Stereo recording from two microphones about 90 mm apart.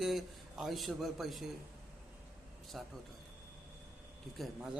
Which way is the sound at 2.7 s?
Centre (ahead or behind).